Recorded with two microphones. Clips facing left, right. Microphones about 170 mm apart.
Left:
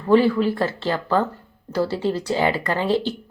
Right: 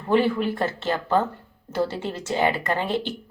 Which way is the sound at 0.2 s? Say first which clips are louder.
Left 3 dB; 20° right (ahead or behind).